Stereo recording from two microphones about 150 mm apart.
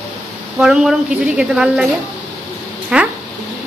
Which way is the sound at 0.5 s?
5° right (ahead or behind).